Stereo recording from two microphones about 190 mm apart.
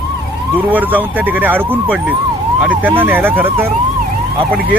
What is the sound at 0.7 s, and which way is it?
Speech, 10° right (ahead or behind).